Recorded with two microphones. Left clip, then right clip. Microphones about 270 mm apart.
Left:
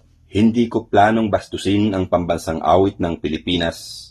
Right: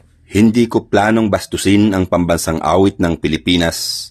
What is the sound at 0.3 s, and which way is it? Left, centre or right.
Speech, right.